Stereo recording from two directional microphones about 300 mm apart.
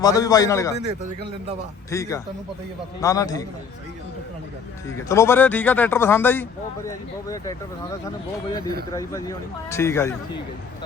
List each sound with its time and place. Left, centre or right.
0.0 s speech: centre
1.9 s speech: centre
4.9 s speech: centre
8.9 s speech: centre